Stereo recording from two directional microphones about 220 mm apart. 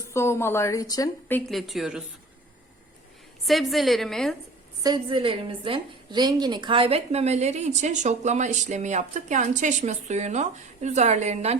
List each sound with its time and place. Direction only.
0.1 s a woman's voice: 10° left (ahead or behind)
1.5 s a woman's voice: centre (ahead or behind)
3.4 s a woman's voice: centre (ahead or behind)
4.8 s a woman's voice: 20° right (ahead or behind)